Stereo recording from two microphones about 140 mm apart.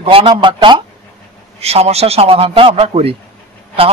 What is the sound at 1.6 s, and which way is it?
A man's voice, 45° right (ahead or behind).